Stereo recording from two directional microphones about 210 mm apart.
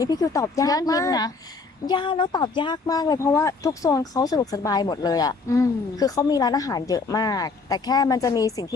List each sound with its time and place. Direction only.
0.0 s speech: 15° left (ahead or behind)